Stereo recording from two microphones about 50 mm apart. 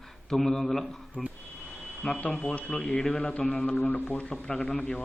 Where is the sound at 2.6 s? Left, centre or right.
Left.